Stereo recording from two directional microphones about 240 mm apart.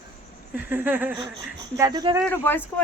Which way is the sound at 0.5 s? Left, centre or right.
Centre.